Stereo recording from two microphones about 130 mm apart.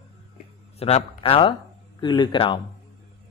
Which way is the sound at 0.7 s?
50° left (ahead or behind).